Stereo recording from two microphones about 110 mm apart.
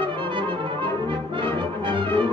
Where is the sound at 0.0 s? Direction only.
50° right (ahead or behind).